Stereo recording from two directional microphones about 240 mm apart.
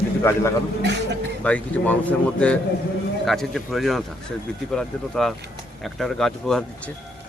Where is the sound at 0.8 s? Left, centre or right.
Right.